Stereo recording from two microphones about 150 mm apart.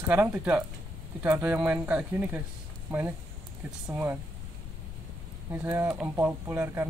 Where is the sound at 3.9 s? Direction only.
15° right (ahead or behind).